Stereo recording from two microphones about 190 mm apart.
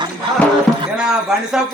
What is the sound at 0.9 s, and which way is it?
Speech, 5° right (ahead or behind).